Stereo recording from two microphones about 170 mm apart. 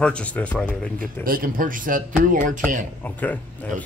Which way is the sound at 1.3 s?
55° right (ahead or behind).